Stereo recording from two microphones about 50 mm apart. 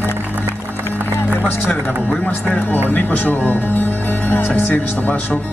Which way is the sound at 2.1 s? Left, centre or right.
Left.